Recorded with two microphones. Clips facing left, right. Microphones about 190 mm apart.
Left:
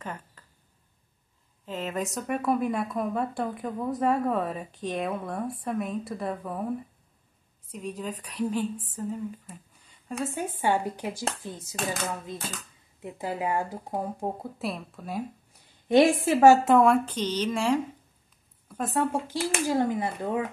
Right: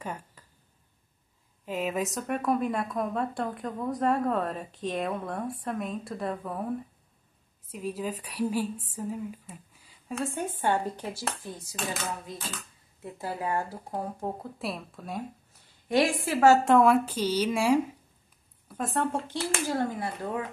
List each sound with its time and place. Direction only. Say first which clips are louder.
0.0 s a sound: right 1 dB; 10° right (ahead or behind)
1.7 s speech: right 2 dB; 10° right (ahead or behind)
7.7 s speech: right 2 dB; 5° right (ahead or behind)
11.2 s a woman's voice: left 2 dB; 20° left (ahead or behind)
11.7 s a sound: left 3 dB; 45° left (ahead or behind)
13.0 s speech: left 3 dB; 15° left (ahead or behind)
14.6 s speech: left 2 dB; centre (ahead or behind)
15.9 s a woman's voice: left 5 dB; 25° left (ahead or behind)
16.6 s speech: left 1 dB; centre (ahead or behind)
18.8 s speech: left 2 dB; centre (ahead or behind); by 20.4 s 20° left (ahead or behind)